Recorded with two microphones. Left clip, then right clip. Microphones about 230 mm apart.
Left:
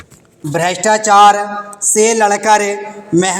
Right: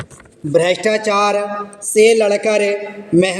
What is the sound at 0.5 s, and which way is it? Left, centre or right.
Speech, centre.